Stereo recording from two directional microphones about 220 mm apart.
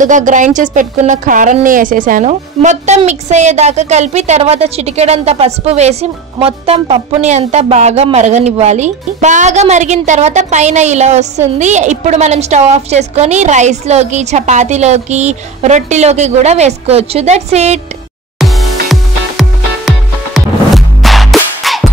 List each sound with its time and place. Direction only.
0.0 s a woman's voice: 35° right (ahead or behind)
18.4 s music: centre (ahead or behind)